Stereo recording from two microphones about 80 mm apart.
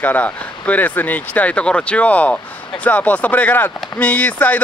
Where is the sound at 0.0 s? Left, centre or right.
Centre.